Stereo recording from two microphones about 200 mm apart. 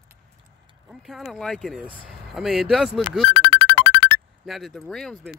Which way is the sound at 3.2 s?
25° right (ahead or behind).